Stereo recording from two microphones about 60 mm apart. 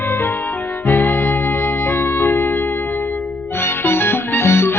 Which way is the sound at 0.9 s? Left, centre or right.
Left.